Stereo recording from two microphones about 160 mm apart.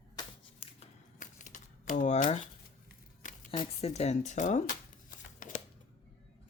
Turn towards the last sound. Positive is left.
turn(degrees=55)  # may be behind; listen again after turning